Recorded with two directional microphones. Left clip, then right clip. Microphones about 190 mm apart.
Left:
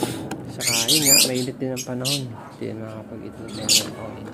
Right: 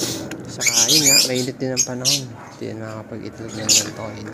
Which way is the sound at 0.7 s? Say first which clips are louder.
Right 3 dB; centre (ahead or behind).